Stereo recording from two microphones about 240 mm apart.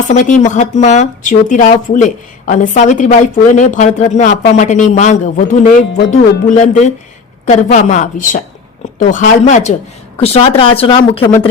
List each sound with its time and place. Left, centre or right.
0.1 s a woman's voice: left